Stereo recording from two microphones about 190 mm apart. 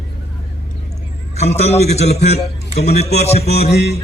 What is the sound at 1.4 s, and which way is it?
A man's voice, 35° left (ahead or behind).